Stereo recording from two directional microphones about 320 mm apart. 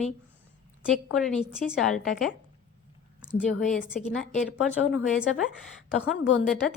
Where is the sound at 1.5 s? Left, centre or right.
Centre.